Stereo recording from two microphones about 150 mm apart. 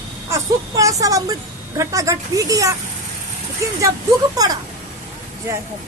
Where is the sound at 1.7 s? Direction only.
20° right (ahead or behind).